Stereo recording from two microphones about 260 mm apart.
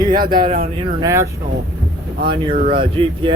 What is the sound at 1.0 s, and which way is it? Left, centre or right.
Speech, centre.